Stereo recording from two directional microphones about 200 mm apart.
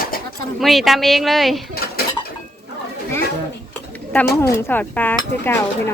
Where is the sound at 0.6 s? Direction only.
Centre (ahead or behind).